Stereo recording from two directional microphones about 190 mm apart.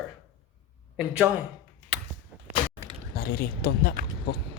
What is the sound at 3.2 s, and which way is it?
Speech, 55° left (ahead or behind).